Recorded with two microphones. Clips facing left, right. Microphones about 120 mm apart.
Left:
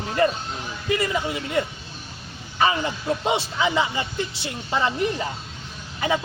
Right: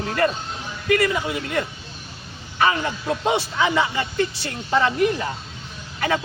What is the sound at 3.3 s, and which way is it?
Speech, 20° left (ahead or behind).